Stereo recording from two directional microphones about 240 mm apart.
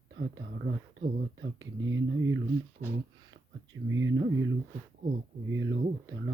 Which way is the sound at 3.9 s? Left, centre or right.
Right.